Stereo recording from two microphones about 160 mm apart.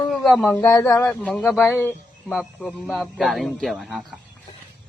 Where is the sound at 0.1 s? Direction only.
Centre (ahead or behind).